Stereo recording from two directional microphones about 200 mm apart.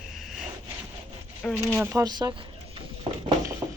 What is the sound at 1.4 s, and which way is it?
Speech, 5° left (ahead or behind).